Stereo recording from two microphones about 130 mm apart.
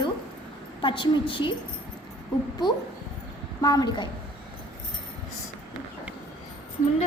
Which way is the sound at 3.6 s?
30° left (ahead or behind).